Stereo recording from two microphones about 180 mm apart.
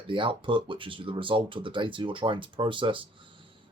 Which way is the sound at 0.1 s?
25° right (ahead or behind).